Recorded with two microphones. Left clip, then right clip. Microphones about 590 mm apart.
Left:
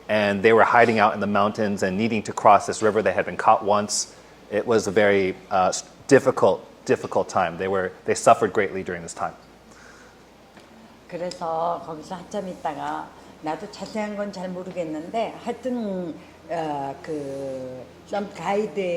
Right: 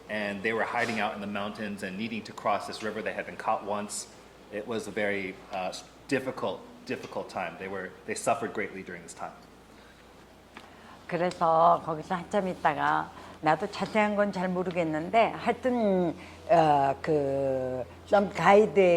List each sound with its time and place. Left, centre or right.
0.1 s a man's voice: left
11.1 s a woman's voice: right
18.1 s a woman's voice: right